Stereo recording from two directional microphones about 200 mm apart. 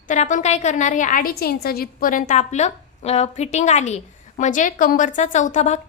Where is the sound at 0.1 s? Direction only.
40° left (ahead or behind).